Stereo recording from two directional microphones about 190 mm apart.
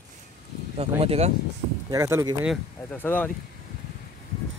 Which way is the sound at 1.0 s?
35° right (ahead or behind).